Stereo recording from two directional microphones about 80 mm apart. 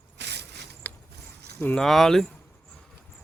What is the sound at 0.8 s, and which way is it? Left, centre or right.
Mechanisms, left.